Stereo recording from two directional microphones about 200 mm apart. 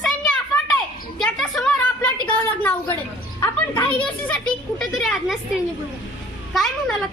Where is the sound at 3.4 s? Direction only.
10° left (ahead or behind).